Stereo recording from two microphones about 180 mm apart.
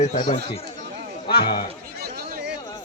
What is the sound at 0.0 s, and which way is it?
Speech, 45° left (ahead or behind).